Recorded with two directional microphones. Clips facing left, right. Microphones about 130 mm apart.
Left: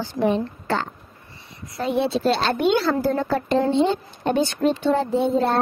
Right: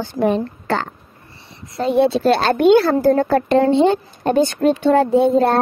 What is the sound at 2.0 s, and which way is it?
Speech, 55° right (ahead or behind).